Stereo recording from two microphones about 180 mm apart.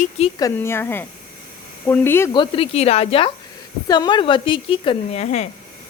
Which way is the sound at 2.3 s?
30° left (ahead or behind).